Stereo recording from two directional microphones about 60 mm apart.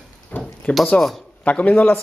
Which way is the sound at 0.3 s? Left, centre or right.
Left.